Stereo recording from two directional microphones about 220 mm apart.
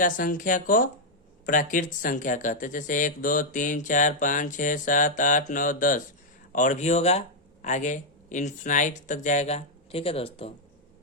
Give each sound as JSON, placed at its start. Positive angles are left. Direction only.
{"t": 0.0, "sound": "speech", "side_deg": 40}